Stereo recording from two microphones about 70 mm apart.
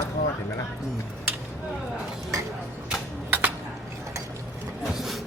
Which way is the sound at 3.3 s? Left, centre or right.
Right.